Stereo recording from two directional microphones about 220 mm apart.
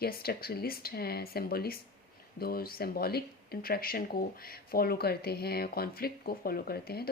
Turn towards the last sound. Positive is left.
turn(degrees=45)  # may be behind; listen again after turning